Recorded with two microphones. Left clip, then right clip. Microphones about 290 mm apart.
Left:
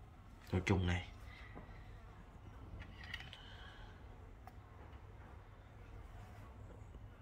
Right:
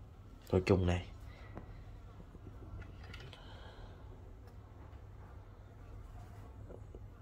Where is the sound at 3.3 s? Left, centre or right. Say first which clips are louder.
Right 1 dB; centre.